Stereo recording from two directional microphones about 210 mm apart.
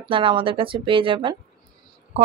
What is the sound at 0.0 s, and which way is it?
Speech, 25° right (ahead or behind).